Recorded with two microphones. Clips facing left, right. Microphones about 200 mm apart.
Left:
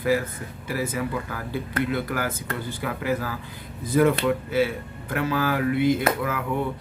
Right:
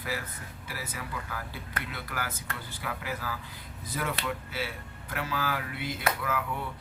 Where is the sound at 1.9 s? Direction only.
50° left (ahead or behind).